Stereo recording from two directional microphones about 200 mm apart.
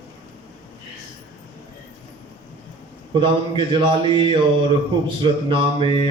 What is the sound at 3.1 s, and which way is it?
Mantra, 25° right (ahead or behind).